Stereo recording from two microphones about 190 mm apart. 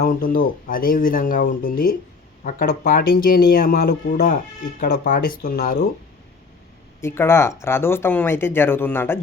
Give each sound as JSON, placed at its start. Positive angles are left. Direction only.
{"t": 0.0, "sound": "speech", "side_deg": 50}
{"t": 7.0, "sound": "speech", "side_deg": 15}